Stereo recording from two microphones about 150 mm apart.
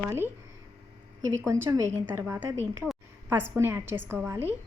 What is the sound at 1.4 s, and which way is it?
A woman's voice, 20° right (ahead or behind).